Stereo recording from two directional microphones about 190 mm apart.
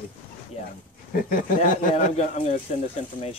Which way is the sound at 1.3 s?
45° left (ahead or behind).